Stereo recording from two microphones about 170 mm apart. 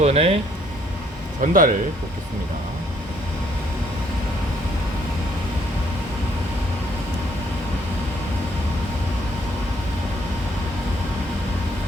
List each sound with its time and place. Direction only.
0.0 s speech: 35° right (ahead or behind)
1.4 s speech: 55° right (ahead or behind)